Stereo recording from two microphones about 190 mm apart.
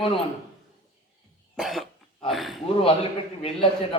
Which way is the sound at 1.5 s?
Centre (ahead or behind).